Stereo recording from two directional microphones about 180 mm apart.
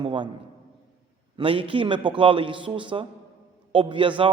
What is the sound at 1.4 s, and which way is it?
A man's voice, 30° right (ahead or behind).